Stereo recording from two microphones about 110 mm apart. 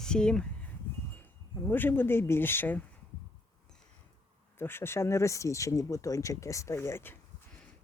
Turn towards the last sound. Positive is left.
turn(degrees=20)  # may be behind; listen again after turning